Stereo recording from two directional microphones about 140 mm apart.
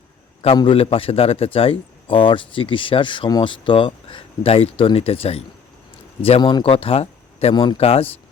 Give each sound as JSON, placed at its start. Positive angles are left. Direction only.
{"t": 0.4, "sound": "a man's voice", "side_deg": 35}
{"t": 6.4, "sound": "speech", "side_deg": 35}
{"t": 7.5, "sound": "speech", "side_deg": 30}
{"t": 7.8, "sound": "a man's voice", "side_deg": 45}